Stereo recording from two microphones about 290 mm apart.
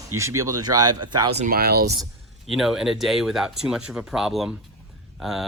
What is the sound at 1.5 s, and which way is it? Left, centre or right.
Speech, right.